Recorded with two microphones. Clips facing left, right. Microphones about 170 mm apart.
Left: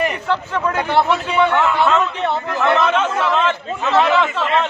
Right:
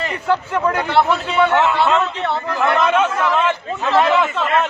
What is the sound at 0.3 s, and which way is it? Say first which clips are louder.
Speech: right 2 dB; 10° right (ahead or behind).